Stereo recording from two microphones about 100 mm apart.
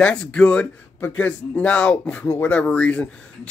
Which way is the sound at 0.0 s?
10° left (ahead or behind).